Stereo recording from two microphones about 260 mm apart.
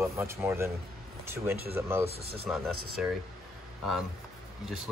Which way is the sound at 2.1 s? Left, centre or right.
Right.